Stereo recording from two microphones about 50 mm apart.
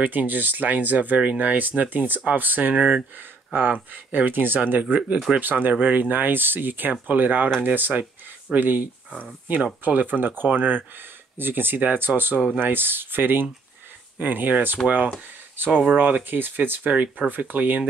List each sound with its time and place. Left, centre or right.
0.0 s speech: right
9.8 s speech: right